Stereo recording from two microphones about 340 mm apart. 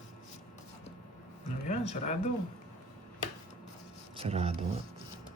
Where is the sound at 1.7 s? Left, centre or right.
Centre.